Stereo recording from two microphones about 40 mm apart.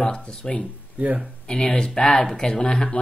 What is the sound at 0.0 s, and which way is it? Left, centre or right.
Speech, left.